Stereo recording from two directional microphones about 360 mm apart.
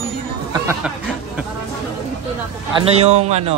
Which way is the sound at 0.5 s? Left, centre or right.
Centre.